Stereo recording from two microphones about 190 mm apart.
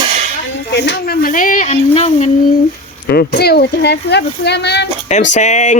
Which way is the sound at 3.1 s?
55° left (ahead or behind).